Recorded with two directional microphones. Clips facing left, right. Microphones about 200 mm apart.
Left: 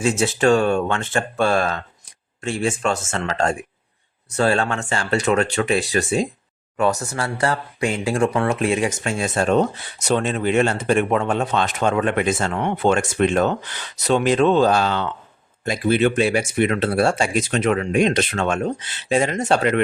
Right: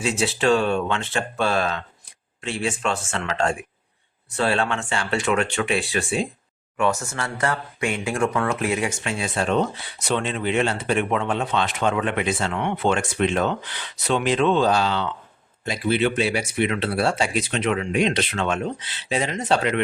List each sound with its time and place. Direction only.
0.0 s speech: 45° left (ahead or behind)